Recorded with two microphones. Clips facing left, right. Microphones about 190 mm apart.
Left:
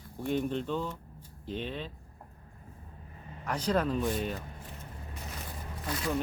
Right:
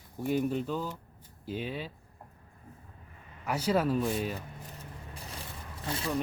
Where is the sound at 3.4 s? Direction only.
5° right (ahead or behind).